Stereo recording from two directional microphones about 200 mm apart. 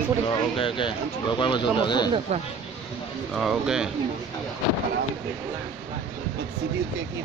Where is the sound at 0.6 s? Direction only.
25° left (ahead or behind).